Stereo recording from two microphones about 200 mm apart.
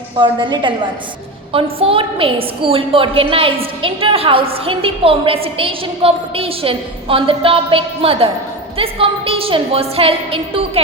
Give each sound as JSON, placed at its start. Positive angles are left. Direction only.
{"t": 0.2, "sound": "a woman's voice", "side_deg": -25}